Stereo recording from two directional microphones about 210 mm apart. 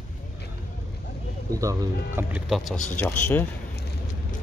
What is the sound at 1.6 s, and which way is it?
Speech, 15° right (ahead or behind).